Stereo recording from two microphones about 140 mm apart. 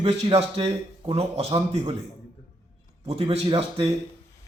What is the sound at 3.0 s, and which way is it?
Speech, 45° right (ahead or behind).